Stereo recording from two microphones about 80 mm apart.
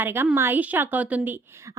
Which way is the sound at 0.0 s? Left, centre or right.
Right.